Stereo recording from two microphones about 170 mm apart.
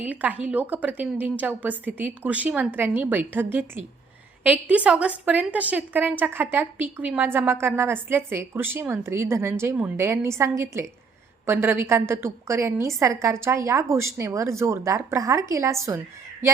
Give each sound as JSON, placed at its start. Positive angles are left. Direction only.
{"t": 0.0, "sound": "a woman's voice", "side_deg": -10}